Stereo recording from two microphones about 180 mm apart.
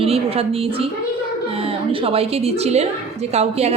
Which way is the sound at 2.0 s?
35° right (ahead or behind).